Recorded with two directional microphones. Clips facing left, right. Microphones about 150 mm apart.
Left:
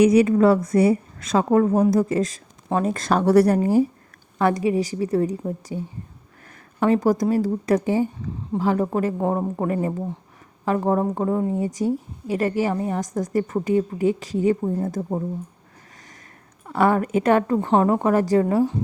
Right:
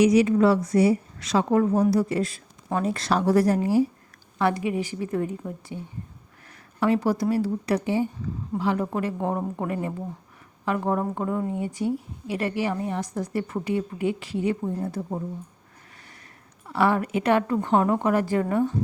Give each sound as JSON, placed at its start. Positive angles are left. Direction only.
{"t": 0.0, "sound": "a woman's voice", "side_deg": 55}
{"t": 3.6, "sound": "a woman's voice", "side_deg": 50}
{"t": 6.7, "sound": "a woman's voice", "side_deg": 45}
{"t": 16.6, "sound": "a woman's voice", "side_deg": 45}